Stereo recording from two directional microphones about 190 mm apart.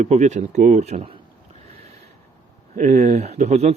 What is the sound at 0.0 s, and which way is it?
Speech, 35° right (ahead or behind).